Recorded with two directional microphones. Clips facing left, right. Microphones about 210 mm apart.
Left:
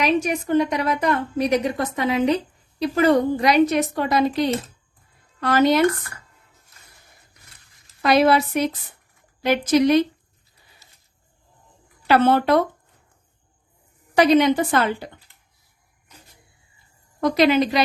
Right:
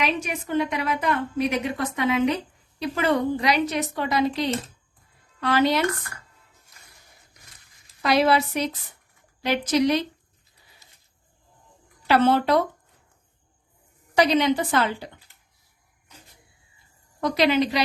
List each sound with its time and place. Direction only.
0.0 s a woman's voice: 40° left (ahead or behind)
8.0 s a woman's voice: 50° left (ahead or behind)
12.0 s speech: 55° left (ahead or behind)
14.2 s a woman's voice: 50° left (ahead or behind)
17.2 s a woman's voice: 50° left (ahead or behind)